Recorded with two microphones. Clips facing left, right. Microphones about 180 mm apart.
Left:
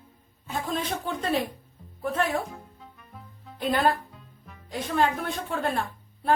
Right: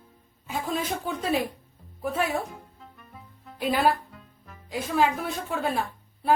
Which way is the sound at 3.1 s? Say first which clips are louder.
Right 2 dB; 5° right (ahead or behind).